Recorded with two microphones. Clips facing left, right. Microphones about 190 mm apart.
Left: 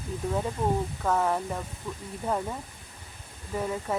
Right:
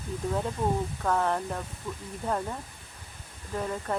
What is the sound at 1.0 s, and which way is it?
Speech, 5° left (ahead or behind).